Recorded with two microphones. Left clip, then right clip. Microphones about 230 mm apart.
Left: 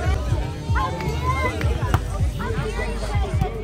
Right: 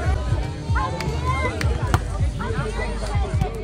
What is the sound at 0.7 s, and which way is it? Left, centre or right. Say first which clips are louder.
Music: left 1 dB; left.